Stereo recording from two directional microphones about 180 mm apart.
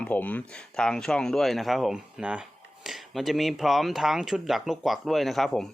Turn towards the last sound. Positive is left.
turn(degrees=0)  # may be behind; listen again after turning